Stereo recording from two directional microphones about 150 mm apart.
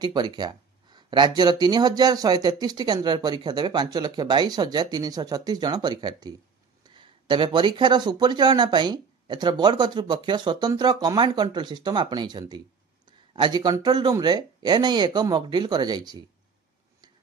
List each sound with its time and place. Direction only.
0.0 s speech: 30° right (ahead or behind)